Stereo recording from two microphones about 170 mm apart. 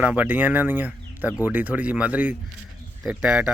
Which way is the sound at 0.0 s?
10° right (ahead or behind).